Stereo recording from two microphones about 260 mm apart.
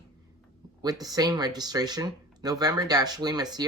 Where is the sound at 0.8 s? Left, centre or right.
Centre.